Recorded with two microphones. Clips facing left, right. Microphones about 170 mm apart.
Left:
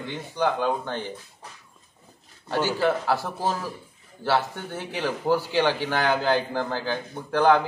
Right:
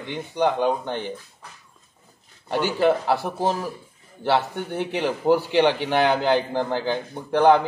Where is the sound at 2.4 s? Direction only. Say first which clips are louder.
Right 3 dB; 15° right (ahead or behind).